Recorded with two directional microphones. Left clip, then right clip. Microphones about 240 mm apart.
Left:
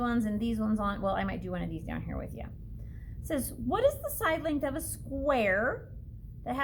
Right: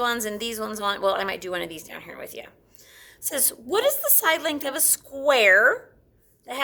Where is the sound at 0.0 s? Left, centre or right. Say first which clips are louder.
Right 7 dB; right.